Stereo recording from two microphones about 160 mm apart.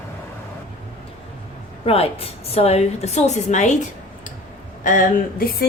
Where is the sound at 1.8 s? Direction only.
40° left (ahead or behind).